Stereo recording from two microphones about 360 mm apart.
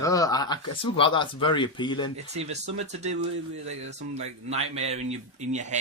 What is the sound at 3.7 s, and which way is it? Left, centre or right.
Speech, centre.